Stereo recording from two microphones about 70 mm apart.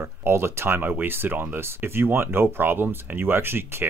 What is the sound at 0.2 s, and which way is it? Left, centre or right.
Speech, right.